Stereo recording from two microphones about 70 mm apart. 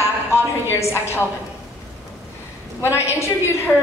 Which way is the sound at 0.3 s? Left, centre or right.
Left.